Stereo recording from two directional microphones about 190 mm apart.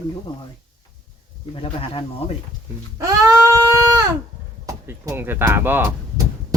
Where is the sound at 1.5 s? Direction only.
30° left (ahead or behind).